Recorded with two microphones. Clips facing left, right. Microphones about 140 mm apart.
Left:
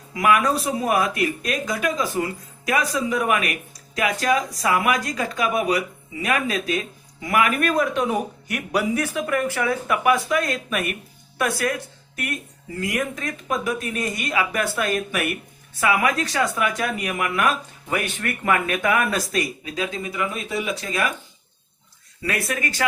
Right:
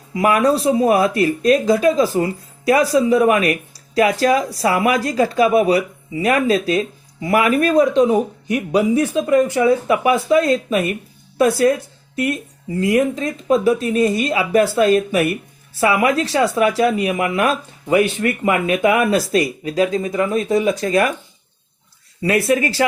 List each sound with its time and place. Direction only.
0.1 s speech: 30° right (ahead or behind)
22.2 s speech: 30° right (ahead or behind)